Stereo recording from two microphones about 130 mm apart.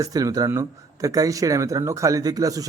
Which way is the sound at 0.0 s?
30° right (ahead or behind).